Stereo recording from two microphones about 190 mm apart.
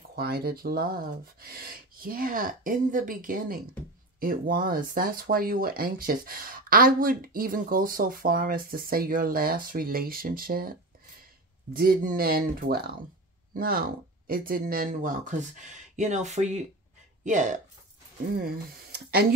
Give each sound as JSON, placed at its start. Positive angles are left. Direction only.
{"t": 0.1, "sound": "speech", "side_deg": -55}
{"t": 18.4, "sound": "speech", "side_deg": -55}